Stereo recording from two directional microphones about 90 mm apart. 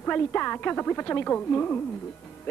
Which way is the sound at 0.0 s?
20° left (ahead or behind).